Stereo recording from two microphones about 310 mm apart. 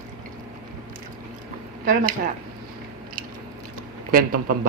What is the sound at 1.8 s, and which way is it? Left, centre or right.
Speech, right.